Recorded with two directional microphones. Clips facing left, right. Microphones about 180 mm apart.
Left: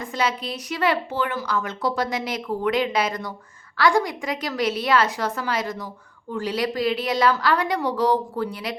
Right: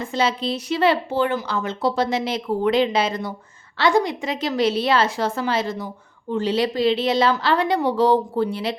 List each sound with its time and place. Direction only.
0.0 s speech: 30° right (ahead or behind)